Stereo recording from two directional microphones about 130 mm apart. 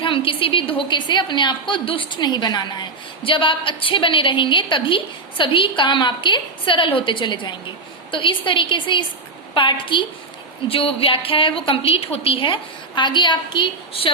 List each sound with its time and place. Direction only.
0.0 s a woman's voice: 40° left (ahead or behind)